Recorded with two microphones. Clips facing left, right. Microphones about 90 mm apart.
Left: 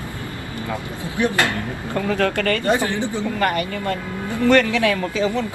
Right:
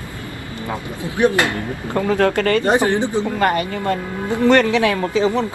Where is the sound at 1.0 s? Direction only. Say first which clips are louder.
Right 4 dB; 20° right (ahead or behind).